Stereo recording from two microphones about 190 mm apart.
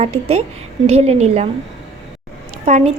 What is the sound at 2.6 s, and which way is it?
Speech, 40° right (ahead or behind).